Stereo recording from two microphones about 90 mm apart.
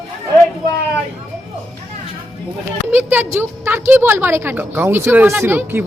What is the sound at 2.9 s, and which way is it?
A woman's voice, 20° right (ahead or behind).